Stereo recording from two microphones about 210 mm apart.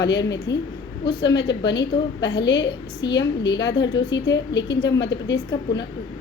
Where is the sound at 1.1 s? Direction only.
20° left (ahead or behind).